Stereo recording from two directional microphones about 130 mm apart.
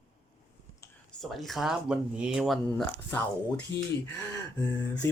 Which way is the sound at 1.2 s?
Centre (ahead or behind).